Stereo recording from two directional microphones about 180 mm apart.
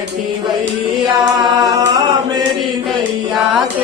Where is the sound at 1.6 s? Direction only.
20° right (ahead or behind).